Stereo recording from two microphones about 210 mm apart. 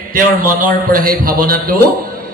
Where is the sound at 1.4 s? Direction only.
45° right (ahead or behind).